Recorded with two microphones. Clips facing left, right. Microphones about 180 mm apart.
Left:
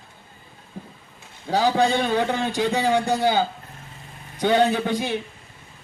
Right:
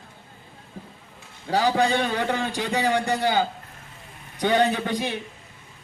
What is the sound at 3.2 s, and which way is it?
Speech, 15° left (ahead or behind).